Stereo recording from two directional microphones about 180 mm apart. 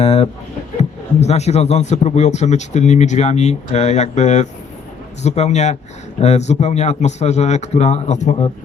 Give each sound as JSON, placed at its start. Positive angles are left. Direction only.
{"t": 0.0, "sound": "a man's voice", "side_deg": 35}